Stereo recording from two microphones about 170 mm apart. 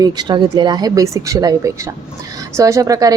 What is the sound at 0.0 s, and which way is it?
A woman's voice, 25° right (ahead or behind).